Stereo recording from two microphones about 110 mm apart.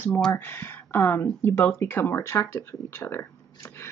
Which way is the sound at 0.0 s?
15° left (ahead or behind).